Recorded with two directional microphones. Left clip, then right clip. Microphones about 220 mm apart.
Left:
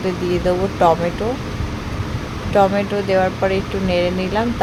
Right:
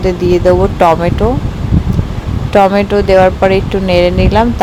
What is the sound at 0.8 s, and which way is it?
Speech, 30° right (ahead or behind).